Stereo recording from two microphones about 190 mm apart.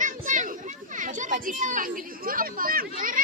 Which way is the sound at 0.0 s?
40° right (ahead or behind).